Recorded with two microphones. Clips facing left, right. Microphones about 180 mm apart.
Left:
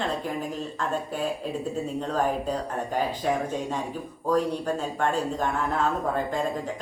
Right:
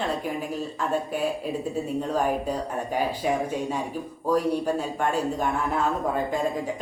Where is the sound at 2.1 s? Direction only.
10° right (ahead or behind).